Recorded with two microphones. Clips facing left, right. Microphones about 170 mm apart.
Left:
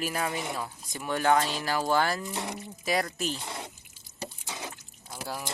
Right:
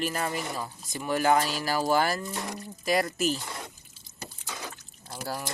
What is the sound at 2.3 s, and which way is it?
Speech, 20° left (ahead or behind).